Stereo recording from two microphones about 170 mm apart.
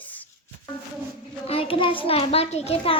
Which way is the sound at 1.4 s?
35° left (ahead or behind).